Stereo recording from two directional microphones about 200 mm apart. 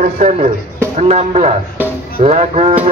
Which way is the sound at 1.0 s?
35° right (ahead or behind).